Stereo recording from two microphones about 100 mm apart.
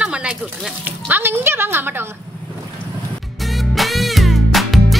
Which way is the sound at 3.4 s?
Centre (ahead or behind).